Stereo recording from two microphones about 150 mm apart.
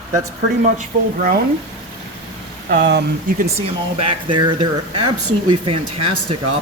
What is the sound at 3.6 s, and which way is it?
Speech, 35° right (ahead or behind).